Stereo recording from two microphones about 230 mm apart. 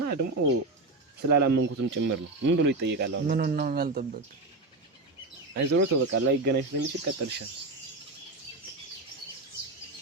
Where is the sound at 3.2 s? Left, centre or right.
Right.